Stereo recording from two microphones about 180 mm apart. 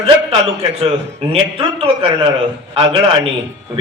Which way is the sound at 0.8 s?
30° right (ahead or behind).